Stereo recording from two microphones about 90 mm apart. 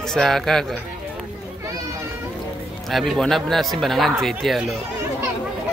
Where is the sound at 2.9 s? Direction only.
Centre (ahead or behind).